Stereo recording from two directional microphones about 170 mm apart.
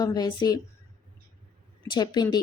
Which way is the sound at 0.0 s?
25° left (ahead or behind).